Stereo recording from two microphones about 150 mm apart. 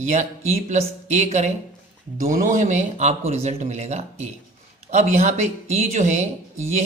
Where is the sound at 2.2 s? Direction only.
60° right (ahead or behind).